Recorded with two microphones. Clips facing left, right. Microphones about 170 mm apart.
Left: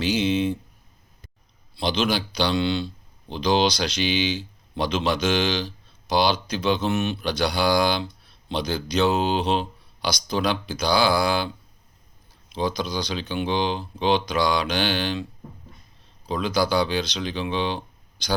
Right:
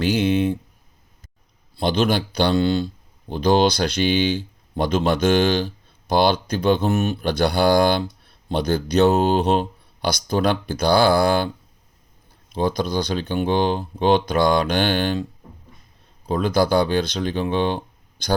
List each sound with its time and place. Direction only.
0.0 s speech: 55° right (ahead or behind)
1.7 s speech: 50° right (ahead or behind)
12.5 s speech: 50° right (ahead or behind)